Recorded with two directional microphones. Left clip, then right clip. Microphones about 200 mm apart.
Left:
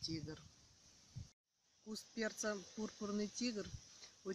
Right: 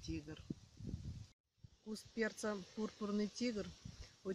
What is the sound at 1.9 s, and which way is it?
Speech, 40° right (ahead or behind).